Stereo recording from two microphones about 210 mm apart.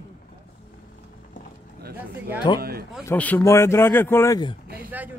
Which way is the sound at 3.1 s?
10° left (ahead or behind).